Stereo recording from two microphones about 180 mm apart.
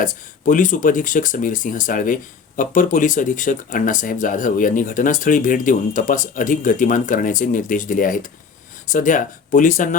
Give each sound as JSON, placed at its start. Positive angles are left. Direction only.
{"t": 0.0, "sound": "speech", "side_deg": 45}